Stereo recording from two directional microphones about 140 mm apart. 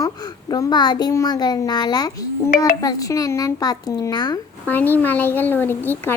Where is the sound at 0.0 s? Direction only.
30° left (ahead or behind).